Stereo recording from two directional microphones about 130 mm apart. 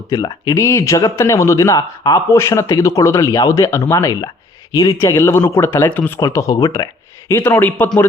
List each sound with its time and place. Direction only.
0.1 s speech: 30° left (ahead or behind); by 6.1 s 15° left (ahead or behind)
6.1 s speech: 25° left (ahead or behind)